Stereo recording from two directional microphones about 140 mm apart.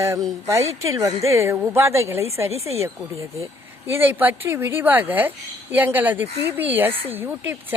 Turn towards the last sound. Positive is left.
turn(degrees=-15)  # may be behind; listen again after turning